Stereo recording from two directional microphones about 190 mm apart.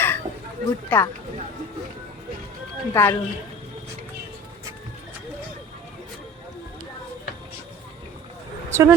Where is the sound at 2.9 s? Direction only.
15° left (ahead or behind).